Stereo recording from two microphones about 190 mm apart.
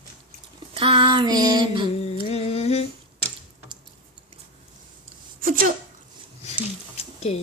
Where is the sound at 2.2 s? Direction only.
35° left (ahead or behind).